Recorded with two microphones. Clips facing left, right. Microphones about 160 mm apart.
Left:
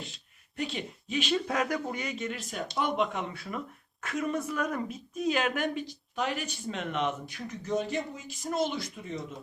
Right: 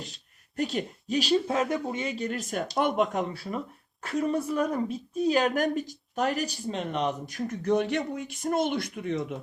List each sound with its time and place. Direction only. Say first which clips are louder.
0.5 s speech: right 5 dB; 45° right (ahead or behind)
2.5 s speech: right 4 dB; 50° right (ahead or behind)
7.6 s speech: right 5 dB; 65° right (ahead or behind)